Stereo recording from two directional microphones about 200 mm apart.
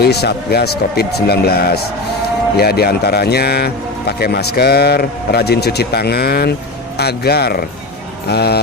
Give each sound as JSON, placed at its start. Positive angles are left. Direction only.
{"t": 0.0, "sound": "speech", "side_deg": 55}